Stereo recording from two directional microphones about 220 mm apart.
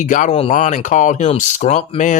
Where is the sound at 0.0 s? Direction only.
35° left (ahead or behind).